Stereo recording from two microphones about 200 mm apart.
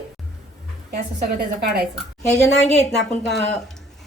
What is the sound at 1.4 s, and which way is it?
Speech, 50° right (ahead or behind).